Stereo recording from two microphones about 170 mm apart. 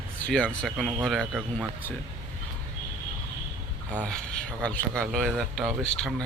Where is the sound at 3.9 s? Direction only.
5° left (ahead or behind).